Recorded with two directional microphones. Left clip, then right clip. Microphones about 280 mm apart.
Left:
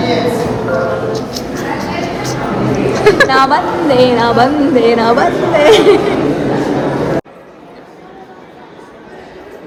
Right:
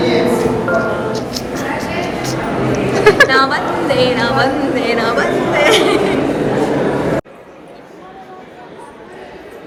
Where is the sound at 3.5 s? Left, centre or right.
Left.